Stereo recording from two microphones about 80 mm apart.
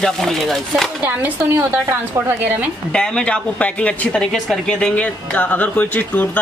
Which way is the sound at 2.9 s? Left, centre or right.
Centre.